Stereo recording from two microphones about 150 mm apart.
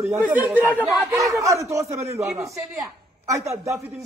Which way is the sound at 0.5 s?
10° left (ahead or behind).